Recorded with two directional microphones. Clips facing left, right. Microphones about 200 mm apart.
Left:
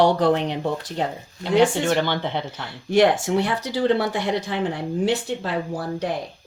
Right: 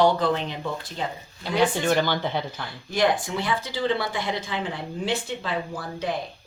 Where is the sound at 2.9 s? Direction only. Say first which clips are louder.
Left 6 dB; 70° left (ahead or behind).